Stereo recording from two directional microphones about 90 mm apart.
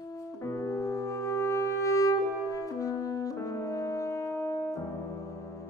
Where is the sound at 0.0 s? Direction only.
40° left (ahead or behind).